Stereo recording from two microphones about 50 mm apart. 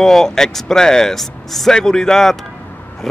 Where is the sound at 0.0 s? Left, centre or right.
Centre.